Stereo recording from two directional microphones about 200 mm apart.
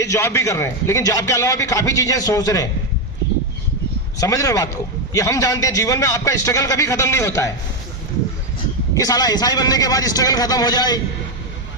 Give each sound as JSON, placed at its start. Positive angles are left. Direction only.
{"t": 0.0, "sound": "a man's voice", "side_deg": 15}
{"t": 4.2, "sound": "a man's voice", "side_deg": 15}
{"t": 9.0, "sound": "a man's voice", "side_deg": 20}